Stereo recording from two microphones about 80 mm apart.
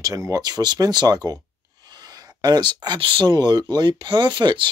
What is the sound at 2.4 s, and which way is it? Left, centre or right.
Speech, right.